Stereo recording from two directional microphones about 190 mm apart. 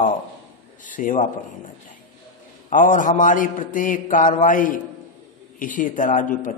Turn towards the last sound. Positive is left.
turn(degrees=45)  # may be behind; listen again after turning